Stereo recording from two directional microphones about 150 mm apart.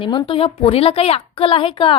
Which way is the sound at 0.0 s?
35° left (ahead or behind).